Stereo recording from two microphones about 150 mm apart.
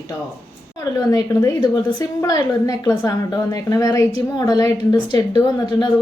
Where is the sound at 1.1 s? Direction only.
25° left (ahead or behind).